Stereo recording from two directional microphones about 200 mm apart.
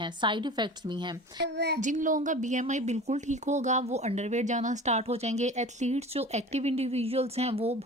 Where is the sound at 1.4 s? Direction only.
55° right (ahead or behind).